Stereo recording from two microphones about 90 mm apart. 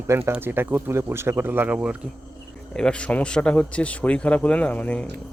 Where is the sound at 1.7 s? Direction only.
10° right (ahead or behind).